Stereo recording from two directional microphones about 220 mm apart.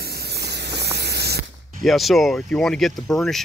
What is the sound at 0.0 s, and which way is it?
Spray, 45° right (ahead or behind).